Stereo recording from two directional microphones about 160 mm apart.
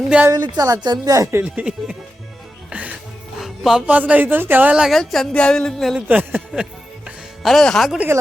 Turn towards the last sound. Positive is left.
turn(degrees=0)  # may be behind; listen again after turning